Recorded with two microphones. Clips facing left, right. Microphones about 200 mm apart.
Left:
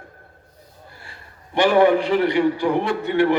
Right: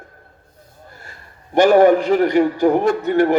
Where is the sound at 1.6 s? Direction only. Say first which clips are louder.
Right 4 dB; 45° right (ahead or behind).